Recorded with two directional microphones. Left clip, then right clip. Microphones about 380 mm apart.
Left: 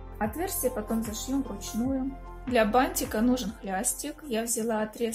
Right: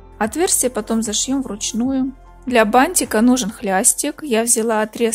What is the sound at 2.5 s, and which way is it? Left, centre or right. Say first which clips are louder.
A woman's voice: right 10 dB; right.